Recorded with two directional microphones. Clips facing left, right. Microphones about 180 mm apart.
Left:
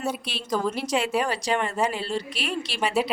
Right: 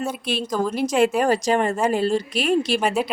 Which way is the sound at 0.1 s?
50° right (ahead or behind).